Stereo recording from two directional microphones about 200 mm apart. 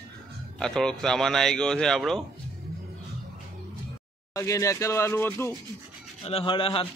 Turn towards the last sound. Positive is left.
turn(degrees=25)  # may be behind; listen again after turning